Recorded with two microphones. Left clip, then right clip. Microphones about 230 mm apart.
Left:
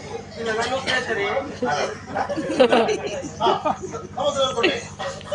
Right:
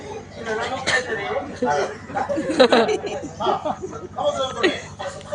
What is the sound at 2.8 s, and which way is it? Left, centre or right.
Speech, right.